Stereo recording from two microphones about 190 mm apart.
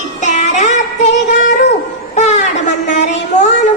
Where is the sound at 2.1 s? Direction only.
35° left (ahead or behind).